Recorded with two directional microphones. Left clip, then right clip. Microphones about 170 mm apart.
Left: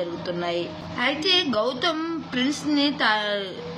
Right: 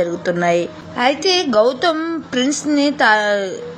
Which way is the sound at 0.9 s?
40° right (ahead or behind).